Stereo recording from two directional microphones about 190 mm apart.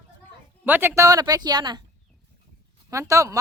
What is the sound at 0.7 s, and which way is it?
Speech, 10° right (ahead or behind).